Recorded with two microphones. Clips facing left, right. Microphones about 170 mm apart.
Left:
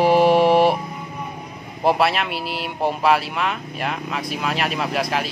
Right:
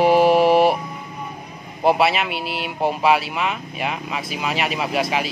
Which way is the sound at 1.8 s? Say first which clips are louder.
Right 1 dB; centre (ahead or behind).